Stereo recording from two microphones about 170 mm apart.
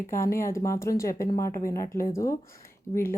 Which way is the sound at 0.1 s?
15° left (ahead or behind).